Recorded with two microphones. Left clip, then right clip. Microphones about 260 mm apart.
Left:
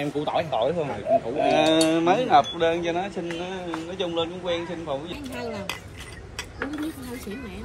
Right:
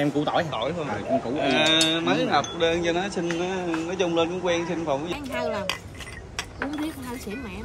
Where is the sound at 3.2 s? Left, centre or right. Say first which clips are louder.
Right 4 dB; centre.